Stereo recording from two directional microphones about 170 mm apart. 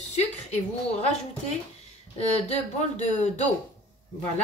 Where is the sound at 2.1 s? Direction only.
40° left (ahead or behind).